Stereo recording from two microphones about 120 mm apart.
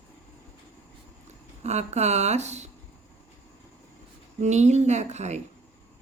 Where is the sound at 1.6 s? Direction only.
70° right (ahead or behind).